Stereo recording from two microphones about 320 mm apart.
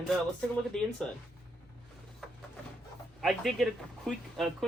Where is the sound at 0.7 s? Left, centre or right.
Centre.